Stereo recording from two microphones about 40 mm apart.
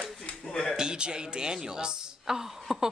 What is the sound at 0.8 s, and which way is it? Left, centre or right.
A woman's voice, right.